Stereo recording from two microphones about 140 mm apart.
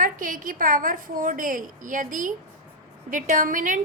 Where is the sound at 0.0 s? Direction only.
75° right (ahead or behind).